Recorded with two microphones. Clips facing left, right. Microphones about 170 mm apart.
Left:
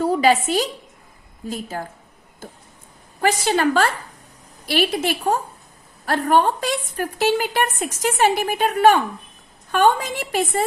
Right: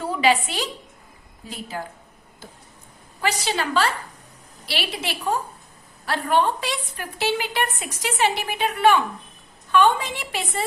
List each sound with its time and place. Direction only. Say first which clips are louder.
0.0 s a woman's voice: left 4 dB; 40° left (ahead or behind)
3.2 s a woman's voice: left 6 dB; 50° left (ahead or behind)